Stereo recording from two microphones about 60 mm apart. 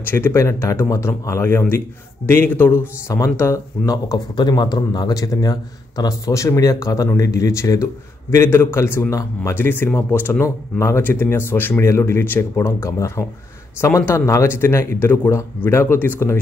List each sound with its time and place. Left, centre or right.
0.0 s speech: left
0.3 s speech: left
3.3 s speech: left
3.8 s a man's voice: left
9.1 s a man's voice: left
9.5 s speech: left
10.4 s speech: left
11.0 s speech: left